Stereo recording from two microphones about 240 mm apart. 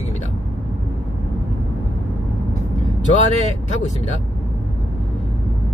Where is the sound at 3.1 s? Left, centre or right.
Left.